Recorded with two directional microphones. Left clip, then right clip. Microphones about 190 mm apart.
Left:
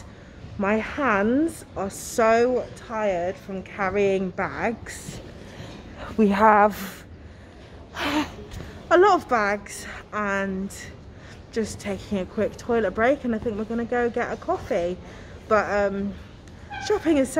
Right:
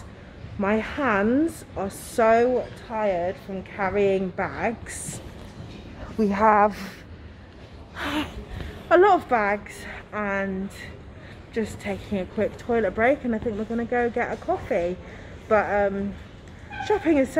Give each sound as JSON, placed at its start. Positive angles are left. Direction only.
{"t": 0.6, "sound": "a woman's voice", "side_deg": 0}
{"t": 7.9, "sound": "gasp", "side_deg": 40}
{"t": 8.8, "sound": "a woman's voice", "side_deg": 5}